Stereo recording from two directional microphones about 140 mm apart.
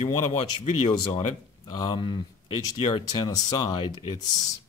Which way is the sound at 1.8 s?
35° left (ahead or behind).